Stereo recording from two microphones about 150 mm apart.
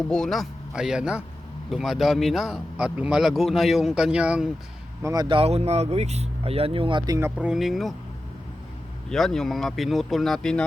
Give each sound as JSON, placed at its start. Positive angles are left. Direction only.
{"t": 0.0, "sound": "speech", "side_deg": 5}
{"t": 5.0, "sound": "speech", "side_deg": -25}
{"t": 5.4, "sound": "speech", "side_deg": -45}
{"t": 9.0, "sound": "speech", "side_deg": 0}